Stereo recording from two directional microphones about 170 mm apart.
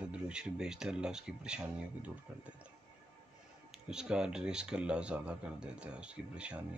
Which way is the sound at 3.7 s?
5° right (ahead or behind).